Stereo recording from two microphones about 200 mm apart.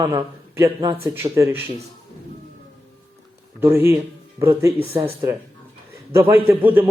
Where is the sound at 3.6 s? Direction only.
10° right (ahead or behind).